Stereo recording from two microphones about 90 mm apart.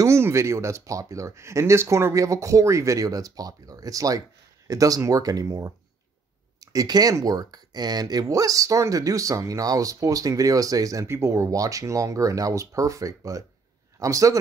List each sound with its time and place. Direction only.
0.0 s speech: 30° right (ahead or behind)